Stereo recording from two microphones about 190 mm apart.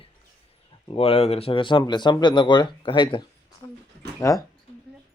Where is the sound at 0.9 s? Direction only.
30° left (ahead or behind).